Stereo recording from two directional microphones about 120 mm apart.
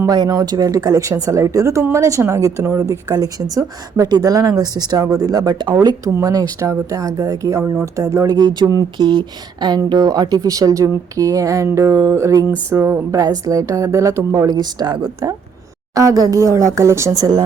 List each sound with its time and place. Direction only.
0.1 s speech: 30° right (ahead or behind)